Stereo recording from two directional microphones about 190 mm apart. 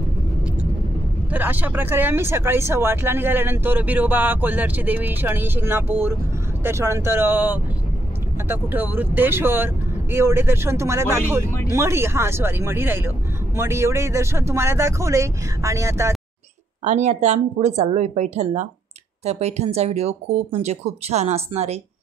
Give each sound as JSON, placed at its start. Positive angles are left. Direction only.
{"t": 1.3, "sound": "speech", "side_deg": -10}
{"t": 16.8, "sound": "speech", "side_deg": -40}